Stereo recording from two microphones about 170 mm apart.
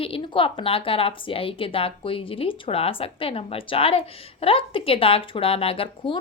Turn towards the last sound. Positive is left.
turn(degrees=35)  # may be behind; listen again after turning